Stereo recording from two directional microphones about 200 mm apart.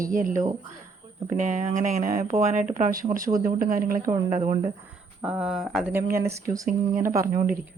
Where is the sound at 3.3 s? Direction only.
40° right (ahead or behind).